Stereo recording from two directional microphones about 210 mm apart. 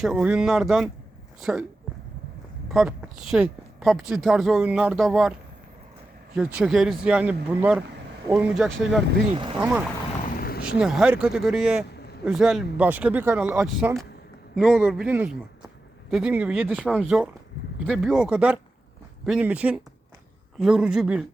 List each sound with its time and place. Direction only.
0.0 s a man's voice: 5° right (ahead or behind)
2.6 s a woman's voice: 5° right (ahead or behind)
6.3 s a man's voice: 5° right (ahead or behind)
10.2 s vehicle: 45° left (ahead or behind)
10.7 s a man's voice: 5° right (ahead or behind)